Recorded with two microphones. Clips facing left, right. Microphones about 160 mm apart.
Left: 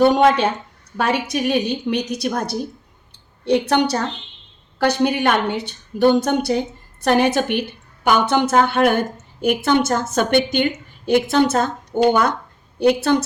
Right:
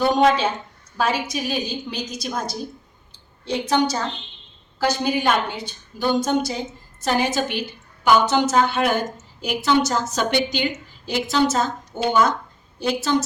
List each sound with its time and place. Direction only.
0.0 s a woman's voice: 60° left (ahead or behind)
3.1 s a sound: 65° left (ahead or behind)
4.8 s a woman's voice: 65° left (ahead or behind)